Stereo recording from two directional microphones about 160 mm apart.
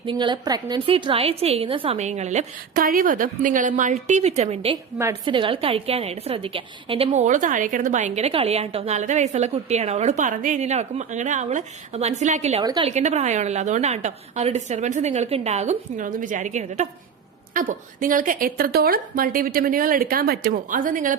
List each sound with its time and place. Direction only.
0.0 s a woman's voice: 30° right (ahead or behind)
2.8 s a woman's voice: 60° right (ahead or behind); by 7.1 s 35° right (ahead or behind)
7.1 s a woman's voice: 50° right (ahead or behind)
12.6 s a woman's voice: 30° right (ahead or behind)
12.9 s a woman's voice: 45° right (ahead or behind)
17.5 s a woman's voice: 60° right (ahead or behind)